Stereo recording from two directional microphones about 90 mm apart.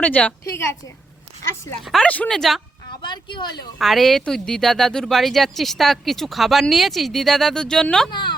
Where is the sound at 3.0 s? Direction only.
60° left (ahead or behind).